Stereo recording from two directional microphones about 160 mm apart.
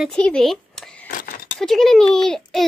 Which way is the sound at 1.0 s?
60° left (ahead or behind).